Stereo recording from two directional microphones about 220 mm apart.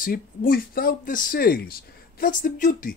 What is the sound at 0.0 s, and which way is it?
Speech, 40° left (ahead or behind).